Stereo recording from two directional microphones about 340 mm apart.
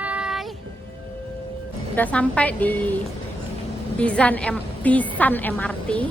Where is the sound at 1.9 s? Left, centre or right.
Centre.